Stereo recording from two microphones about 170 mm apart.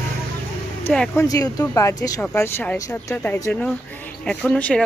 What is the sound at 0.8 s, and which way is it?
Speech, 10° left (ahead or behind).